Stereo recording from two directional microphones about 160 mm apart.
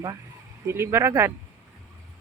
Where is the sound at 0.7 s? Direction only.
15° right (ahead or behind).